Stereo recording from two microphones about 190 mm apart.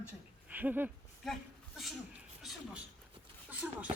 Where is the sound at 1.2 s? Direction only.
Centre (ahead or behind).